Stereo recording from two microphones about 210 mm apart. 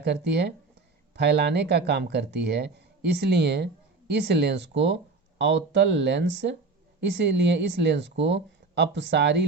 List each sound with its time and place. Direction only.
0.0 s speech: 50° right (ahead or behind)